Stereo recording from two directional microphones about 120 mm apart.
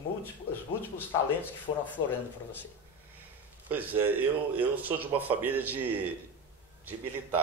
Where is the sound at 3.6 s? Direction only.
15° right (ahead or behind).